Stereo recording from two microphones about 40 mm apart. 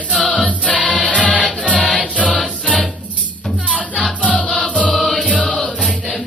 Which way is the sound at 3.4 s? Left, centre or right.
Centre.